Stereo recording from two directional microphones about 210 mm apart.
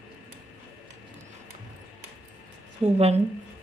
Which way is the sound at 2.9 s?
30° right (ahead or behind).